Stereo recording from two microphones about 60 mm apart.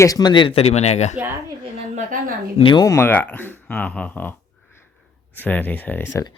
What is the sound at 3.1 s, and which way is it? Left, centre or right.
Speech, left.